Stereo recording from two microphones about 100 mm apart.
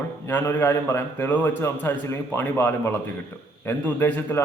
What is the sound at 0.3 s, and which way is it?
A man's voice, 20° left (ahead or behind).